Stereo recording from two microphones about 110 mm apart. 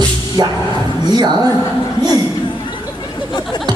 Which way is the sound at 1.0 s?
40° right (ahead or behind).